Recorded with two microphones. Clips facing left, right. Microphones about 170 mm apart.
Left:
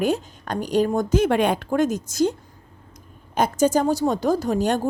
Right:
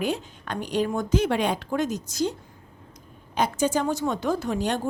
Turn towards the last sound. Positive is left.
turn(degrees=45)  # may be behind; listen again after turning